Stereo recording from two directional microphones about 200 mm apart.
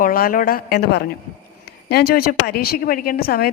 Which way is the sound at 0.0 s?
45° left (ahead or behind).